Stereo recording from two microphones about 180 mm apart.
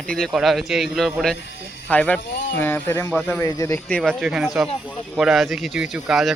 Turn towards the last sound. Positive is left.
turn(degrees=0)  # may be behind; listen again after turning